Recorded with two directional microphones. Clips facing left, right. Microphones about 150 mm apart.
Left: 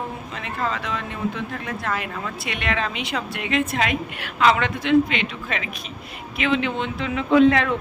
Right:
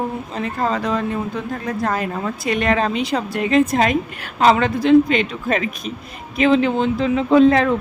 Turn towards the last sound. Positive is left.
turn(degrees=-35)  # may be behind; listen again after turning